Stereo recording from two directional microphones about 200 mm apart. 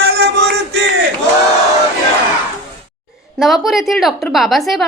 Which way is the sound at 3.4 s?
Centre (ahead or behind).